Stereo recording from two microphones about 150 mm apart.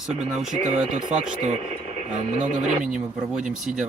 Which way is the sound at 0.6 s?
50° right (ahead or behind).